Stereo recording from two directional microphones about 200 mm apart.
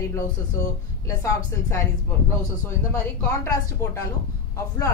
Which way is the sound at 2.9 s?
15° left (ahead or behind).